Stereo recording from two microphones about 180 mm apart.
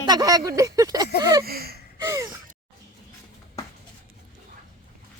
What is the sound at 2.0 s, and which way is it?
Gasp, 15° right (ahead or behind).